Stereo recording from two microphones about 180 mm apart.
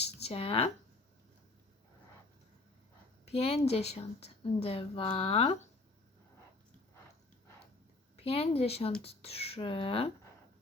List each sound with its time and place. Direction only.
0.0 s a sound: 35° left (ahead or behind)
3.2 s a woman's voice: 35° left (ahead or behind)
8.1 s a woman's voice: 30° left (ahead or behind)